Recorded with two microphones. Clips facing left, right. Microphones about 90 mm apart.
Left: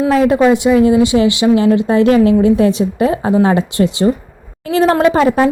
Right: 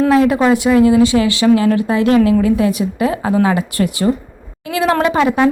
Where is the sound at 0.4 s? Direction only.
20° left (ahead or behind).